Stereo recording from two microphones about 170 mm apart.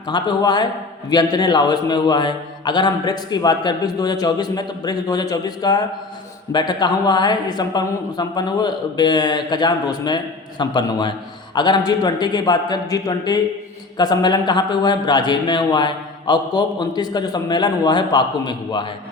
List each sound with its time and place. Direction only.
0.1 s a man's voice: 25° left (ahead or behind)